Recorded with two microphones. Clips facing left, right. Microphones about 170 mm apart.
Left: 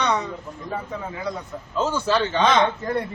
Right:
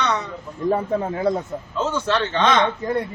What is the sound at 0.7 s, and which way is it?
Speech, 50° right (ahead or behind).